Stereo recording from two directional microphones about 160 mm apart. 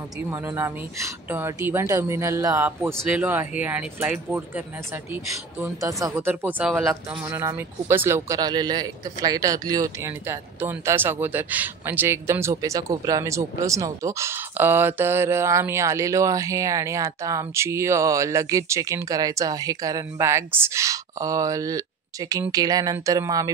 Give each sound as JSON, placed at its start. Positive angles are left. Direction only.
{"t": 0.3, "sound": "speech", "side_deg": -15}
{"t": 7.2, "sound": "speech", "side_deg": -20}